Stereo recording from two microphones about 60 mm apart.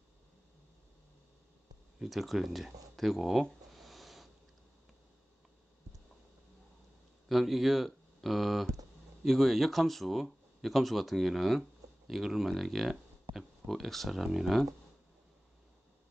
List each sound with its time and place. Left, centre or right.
2.0 s speech: centre
3.7 s a sound: centre
7.2 s speech: centre